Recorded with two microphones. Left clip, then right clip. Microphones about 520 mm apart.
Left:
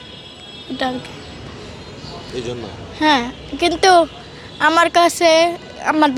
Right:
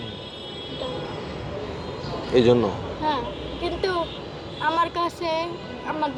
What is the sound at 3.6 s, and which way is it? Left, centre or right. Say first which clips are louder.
A woman's voice: left 14 dB; left.